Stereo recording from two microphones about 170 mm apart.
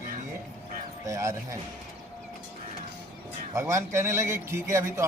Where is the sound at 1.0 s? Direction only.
20° right (ahead or behind).